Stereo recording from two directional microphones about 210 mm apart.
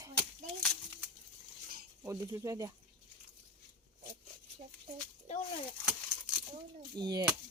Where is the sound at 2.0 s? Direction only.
10° right (ahead or behind).